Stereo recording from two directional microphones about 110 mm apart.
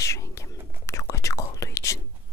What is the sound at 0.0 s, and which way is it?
Whispering, 30° left (ahead or behind).